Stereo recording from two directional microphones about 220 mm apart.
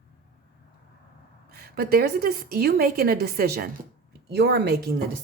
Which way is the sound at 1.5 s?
45° right (ahead or behind).